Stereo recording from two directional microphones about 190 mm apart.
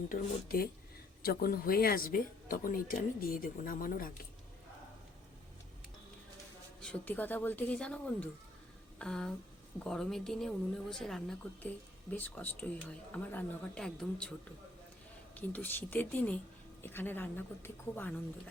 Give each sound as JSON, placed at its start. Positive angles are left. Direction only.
{"t": 0.1, "sound": "speech", "side_deg": 50}
{"t": 6.8, "sound": "a woman's voice", "side_deg": 10}
{"t": 15.4, "sound": "speech", "side_deg": 10}